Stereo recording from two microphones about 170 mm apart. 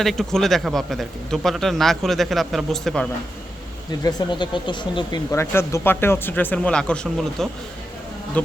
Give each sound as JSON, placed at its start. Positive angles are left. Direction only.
{"t": 0.0, "sound": "speech", "side_deg": 0}
{"t": 4.0, "sound": "speech", "side_deg": 25}
{"t": 5.3, "sound": "speech", "side_deg": 15}